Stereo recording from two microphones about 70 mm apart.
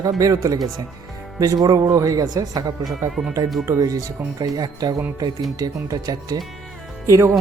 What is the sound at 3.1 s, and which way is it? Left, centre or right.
Speech, centre.